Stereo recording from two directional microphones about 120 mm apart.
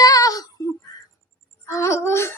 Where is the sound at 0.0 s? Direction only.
30° left (ahead or behind).